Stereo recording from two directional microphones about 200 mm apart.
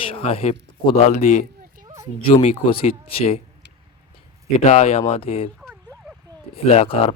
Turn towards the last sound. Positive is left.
turn(degrees=30)  # may be behind; listen again after turning